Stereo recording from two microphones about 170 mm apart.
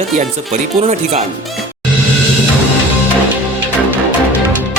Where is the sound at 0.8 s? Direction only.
45° right (ahead or behind).